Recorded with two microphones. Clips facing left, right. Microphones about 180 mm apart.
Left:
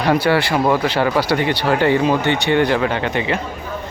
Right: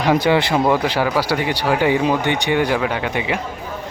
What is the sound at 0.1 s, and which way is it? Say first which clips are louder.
Speech: even; 15° right (ahead or behind).